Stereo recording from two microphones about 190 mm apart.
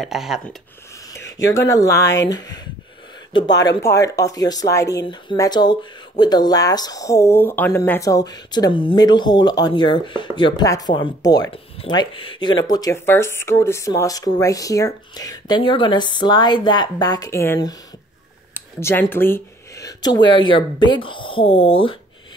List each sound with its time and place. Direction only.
0.0 s speech: centre (ahead or behind)
1.0 s speech: 15° left (ahead or behind)